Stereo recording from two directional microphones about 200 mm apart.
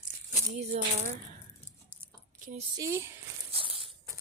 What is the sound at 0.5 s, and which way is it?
Speech, 35° right (ahead or behind).